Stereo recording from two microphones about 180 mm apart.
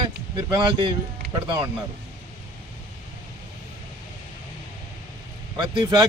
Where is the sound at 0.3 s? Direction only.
25° right (ahead or behind).